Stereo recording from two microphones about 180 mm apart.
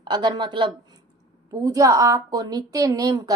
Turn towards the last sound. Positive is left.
turn(degrees=-20)  # may be behind; listen again after turning